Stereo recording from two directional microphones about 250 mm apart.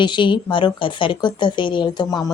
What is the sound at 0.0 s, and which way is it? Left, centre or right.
A woman's voice, centre.